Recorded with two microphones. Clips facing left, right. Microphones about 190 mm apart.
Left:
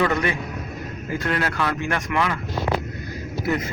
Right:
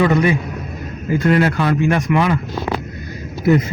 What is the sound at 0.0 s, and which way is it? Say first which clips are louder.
A man's voice: right 7 dB; 15° right (ahead or behind).